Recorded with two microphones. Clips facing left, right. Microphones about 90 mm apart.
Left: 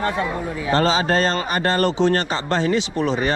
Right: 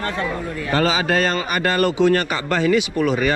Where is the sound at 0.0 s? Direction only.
15° left (ahead or behind).